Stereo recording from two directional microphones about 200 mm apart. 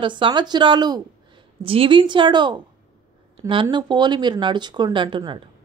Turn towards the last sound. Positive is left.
turn(degrees=-25)  # may be behind; listen again after turning